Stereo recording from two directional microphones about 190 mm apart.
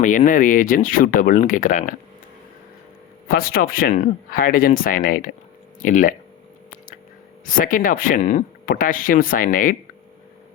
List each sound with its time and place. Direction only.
0.0 s speech: 40° left (ahead or behind)
3.2 s speech: 50° left (ahead or behind)
7.4 s speech: 45° left (ahead or behind)